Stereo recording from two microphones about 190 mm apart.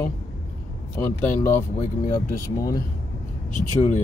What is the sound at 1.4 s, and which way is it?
Speech, 10° left (ahead or behind).